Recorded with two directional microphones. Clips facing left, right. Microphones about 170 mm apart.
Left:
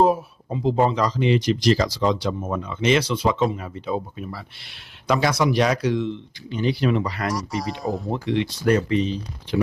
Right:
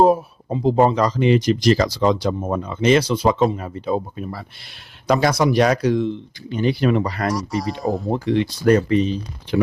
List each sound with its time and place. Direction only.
0.0 s speech: 40° right (ahead or behind)
2.4 s speech: 35° right (ahead or behind)
7.3 s speech: centre (ahead or behind)
8.0 s speech: 40° right (ahead or behind)